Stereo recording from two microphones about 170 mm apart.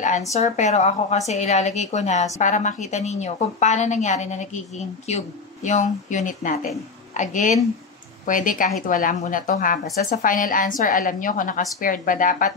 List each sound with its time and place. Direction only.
0.3 s a woman's voice: 45° left (ahead or behind)